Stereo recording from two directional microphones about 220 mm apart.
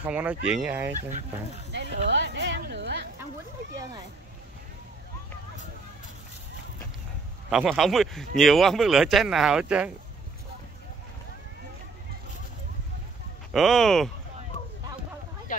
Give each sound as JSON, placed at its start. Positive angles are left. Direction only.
{"t": 0.0, "sound": "speech", "side_deg": -5}
{"t": 1.7, "sound": "a sound", "side_deg": -50}
{"t": 7.4, "sound": "speech", "side_deg": 0}
{"t": 13.5, "sound": "speech", "side_deg": 0}